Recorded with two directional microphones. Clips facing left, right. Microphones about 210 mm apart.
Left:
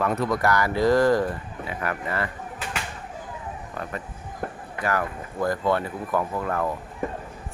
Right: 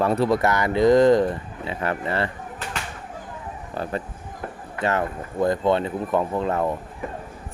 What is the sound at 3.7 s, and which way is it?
Speech, 30° right (ahead or behind).